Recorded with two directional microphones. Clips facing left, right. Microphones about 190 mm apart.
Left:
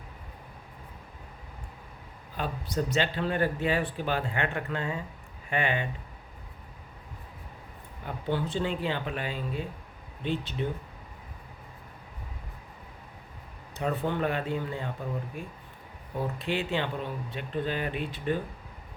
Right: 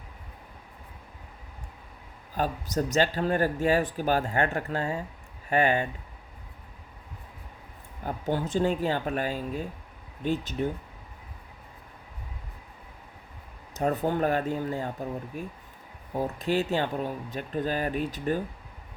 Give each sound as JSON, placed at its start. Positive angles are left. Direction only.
{"t": 2.3, "sound": "speech", "side_deg": -45}
{"t": 8.0, "sound": "speech", "side_deg": -45}
{"t": 13.7, "sound": "speech", "side_deg": -40}
{"t": 16.1, "sound": "speech", "side_deg": -40}